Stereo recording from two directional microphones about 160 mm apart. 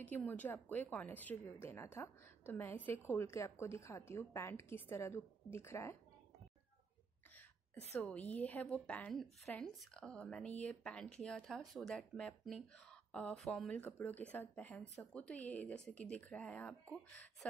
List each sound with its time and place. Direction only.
0.0 s speech: 10° left (ahead or behind)
8.0 s speech: 10° left (ahead or behind)